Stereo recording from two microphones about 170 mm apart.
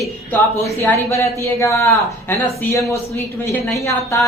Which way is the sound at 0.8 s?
15° left (ahead or behind).